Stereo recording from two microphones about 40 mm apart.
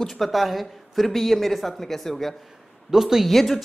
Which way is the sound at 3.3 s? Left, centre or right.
Centre.